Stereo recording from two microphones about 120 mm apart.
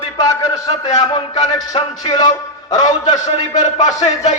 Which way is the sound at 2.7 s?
35° left (ahead or behind).